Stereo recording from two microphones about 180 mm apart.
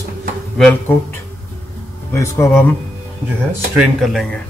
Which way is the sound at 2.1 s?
15° left (ahead or behind).